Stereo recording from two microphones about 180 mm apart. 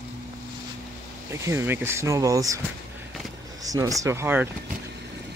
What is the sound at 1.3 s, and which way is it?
Speech, 15° right (ahead or behind).